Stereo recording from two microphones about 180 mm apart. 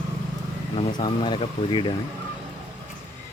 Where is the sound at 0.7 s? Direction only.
30° left (ahead or behind).